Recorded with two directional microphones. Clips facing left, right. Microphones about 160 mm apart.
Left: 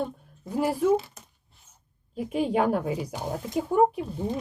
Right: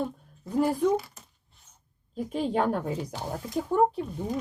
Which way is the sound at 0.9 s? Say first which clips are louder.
Left 2 dB; 25° left (ahead or behind).